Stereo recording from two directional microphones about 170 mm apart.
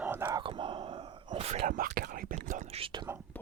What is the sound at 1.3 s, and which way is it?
Whispering, 35° right (ahead or behind).